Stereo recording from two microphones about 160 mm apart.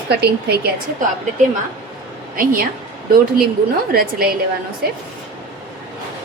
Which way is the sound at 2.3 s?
60° right (ahead or behind).